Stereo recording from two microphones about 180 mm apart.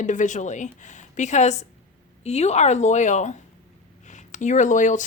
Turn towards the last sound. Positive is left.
turn(degrees=45)  # may be behind; listen again after turning